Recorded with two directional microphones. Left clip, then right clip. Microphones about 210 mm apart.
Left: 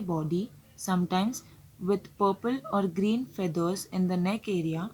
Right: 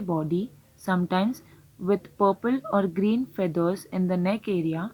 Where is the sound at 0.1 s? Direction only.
25° right (ahead or behind).